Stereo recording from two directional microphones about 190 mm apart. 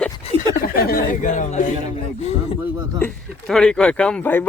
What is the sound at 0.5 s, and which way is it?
Speech, 50° left (ahead or behind).